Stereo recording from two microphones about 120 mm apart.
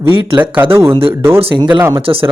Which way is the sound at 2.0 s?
50° right (ahead or behind).